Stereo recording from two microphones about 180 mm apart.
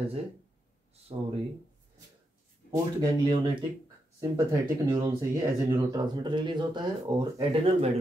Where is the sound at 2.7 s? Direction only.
25° right (ahead or behind).